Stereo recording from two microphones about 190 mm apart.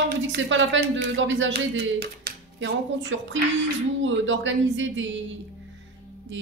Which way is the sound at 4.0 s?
80° right.